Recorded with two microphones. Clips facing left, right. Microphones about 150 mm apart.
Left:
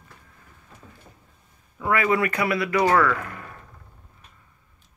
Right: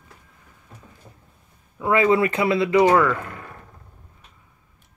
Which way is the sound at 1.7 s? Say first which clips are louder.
Right 4 dB; 20° right (ahead or behind).